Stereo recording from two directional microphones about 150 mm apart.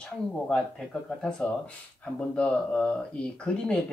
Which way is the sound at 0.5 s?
5° left (ahead or behind).